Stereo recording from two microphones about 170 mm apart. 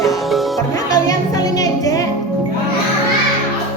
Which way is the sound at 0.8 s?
20° left (ahead or behind).